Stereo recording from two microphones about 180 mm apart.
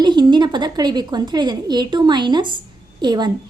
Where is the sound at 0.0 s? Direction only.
25° right (ahead or behind).